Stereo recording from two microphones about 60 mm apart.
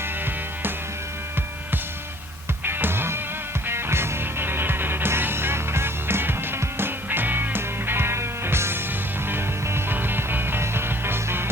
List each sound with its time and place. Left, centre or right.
2.6 s music: right